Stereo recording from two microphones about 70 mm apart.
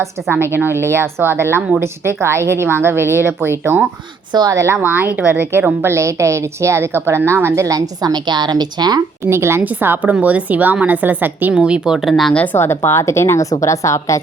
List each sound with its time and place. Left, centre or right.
0.0 s a woman's voice: right
4.3 s speech: right
4.5 s a woman's voice: right
4.8 s a woman's voice: right
9.2 s a woman's voice: right
10.0 s a woman's voice: right
11.6 s speech: centre
12.0 s speech: centre
12.5 s a woman's voice: left